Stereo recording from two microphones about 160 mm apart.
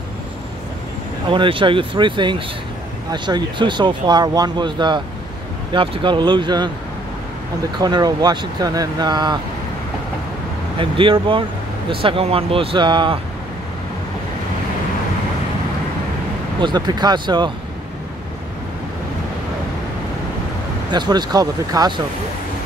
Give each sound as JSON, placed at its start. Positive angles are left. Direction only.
{"t": 1.3, "sound": "speech", "side_deg": -30}
{"t": 7.8, "sound": "speech", "side_deg": -25}
{"t": 10.8, "sound": "speech", "side_deg": -35}
{"t": 16.5, "sound": "speech", "side_deg": -30}
{"t": 20.9, "sound": "speech", "side_deg": -25}